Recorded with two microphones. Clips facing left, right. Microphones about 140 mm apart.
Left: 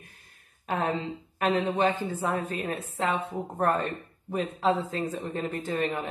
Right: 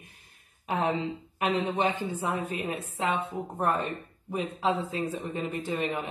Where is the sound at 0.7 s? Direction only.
15° right (ahead or behind).